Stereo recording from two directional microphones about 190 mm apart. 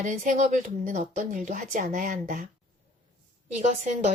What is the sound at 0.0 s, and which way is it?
Speech, 40° right (ahead or behind).